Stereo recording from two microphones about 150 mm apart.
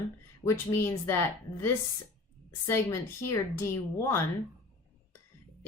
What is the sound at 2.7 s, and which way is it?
A woman's voice, 15° left (ahead or behind).